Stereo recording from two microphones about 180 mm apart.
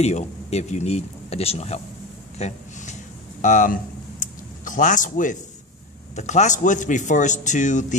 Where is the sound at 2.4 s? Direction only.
40° left (ahead or behind).